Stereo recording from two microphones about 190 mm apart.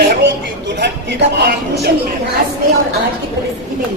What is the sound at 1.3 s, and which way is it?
Speech, 60° right (ahead or behind).